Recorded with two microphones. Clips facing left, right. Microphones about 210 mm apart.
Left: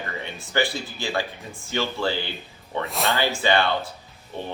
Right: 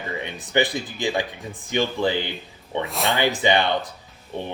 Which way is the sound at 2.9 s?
Centre (ahead or behind).